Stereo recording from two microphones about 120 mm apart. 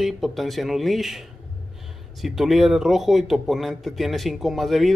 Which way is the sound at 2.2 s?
Centre (ahead or behind).